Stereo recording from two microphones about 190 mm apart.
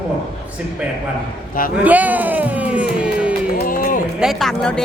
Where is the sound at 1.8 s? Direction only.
10° right (ahead or behind).